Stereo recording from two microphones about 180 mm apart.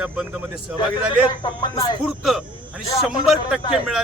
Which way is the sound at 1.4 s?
25° left (ahead or behind).